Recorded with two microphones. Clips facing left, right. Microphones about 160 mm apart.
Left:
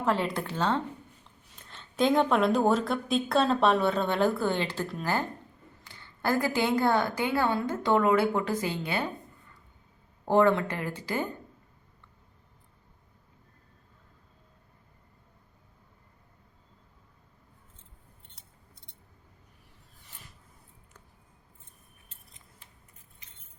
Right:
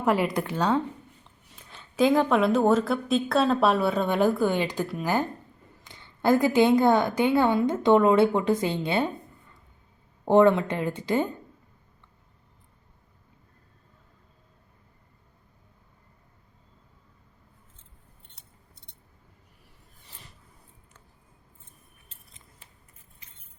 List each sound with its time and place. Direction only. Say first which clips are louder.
0.0 s a woman's voice: right 4 dB; 10° right (ahead or behind)
10.2 s a woman's voice: right 4 dB; 20° right (ahead or behind)